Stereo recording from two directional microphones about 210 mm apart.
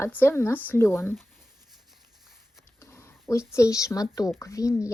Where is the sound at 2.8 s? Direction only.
10° left (ahead or behind).